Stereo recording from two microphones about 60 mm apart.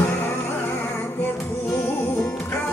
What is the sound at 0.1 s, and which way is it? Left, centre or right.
Music, left.